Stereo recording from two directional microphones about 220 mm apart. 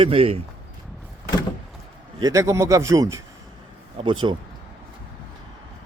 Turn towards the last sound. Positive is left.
turn(degrees=-20)  # may be behind; listen again after turning